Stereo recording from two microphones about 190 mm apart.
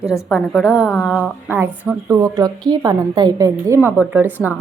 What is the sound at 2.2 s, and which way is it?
A woman's voice, 20° right (ahead or behind).